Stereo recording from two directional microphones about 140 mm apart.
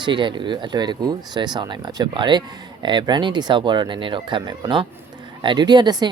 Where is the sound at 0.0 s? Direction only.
35° right (ahead or behind).